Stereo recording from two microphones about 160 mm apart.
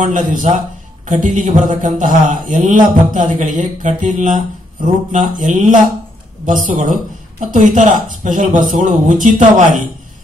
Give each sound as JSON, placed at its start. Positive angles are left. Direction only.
{"t": 0.0, "sound": "a man's voice", "side_deg": -55}